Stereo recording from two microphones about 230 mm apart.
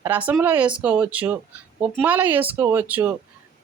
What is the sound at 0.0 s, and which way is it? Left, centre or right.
Speech, centre.